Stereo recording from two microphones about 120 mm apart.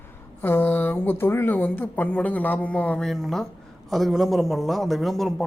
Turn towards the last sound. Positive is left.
turn(degrees=0)  # may be behind; listen again after turning